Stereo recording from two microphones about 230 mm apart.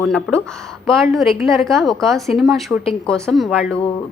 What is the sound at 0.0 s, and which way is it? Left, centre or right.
A woman's voice, centre.